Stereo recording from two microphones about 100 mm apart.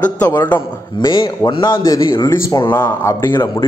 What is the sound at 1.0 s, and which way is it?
Speech, 45° left (ahead or behind).